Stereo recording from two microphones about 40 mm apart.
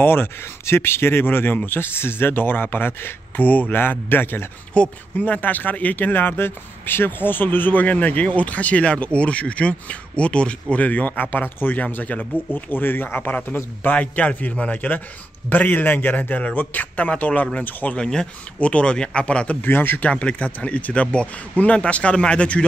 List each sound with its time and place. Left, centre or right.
0.0 s speech: left
3.9 s speech: left
4.7 s speech: left
5.2 s speech: left
11.9 s speech: left
12.5 s speech: left
13.9 s speech: left
17.9 s speech: centre
18.6 s speech: left
19.6 s speech: left
20.0 s speech: left